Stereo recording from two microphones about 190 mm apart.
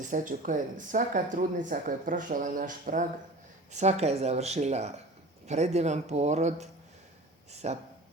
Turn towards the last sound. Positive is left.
turn(degrees=-35)  # may be behind; listen again after turning